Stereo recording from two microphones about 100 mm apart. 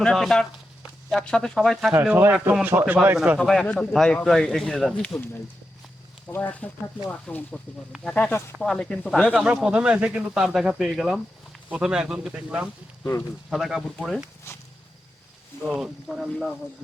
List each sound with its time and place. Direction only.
0.0 s speech: 5° left (ahead or behind)
2.1 s speech: 20° right (ahead or behind)
3.3 s speech: 5° left (ahead or behind)
5.0 s speech: 20° left (ahead or behind)
6.3 s speech: 15° left (ahead or behind)
9.3 s speech: 5° right (ahead or behind)
14.5 s speech: 25° left (ahead or behind)
15.6 s speech: 5° right (ahead or behind)